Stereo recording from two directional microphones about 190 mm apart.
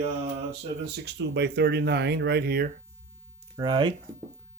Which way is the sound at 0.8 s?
65° right (ahead or behind).